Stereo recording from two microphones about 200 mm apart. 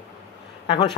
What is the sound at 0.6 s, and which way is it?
Speech, 25° left (ahead or behind).